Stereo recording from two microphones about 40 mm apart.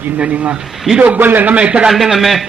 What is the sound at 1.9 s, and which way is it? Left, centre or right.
Speech, centre.